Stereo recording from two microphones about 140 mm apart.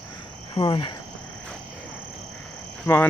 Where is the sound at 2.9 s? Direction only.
20° left (ahead or behind).